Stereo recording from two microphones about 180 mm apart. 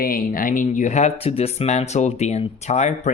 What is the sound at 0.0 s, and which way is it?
Speech, 50° left (ahead or behind).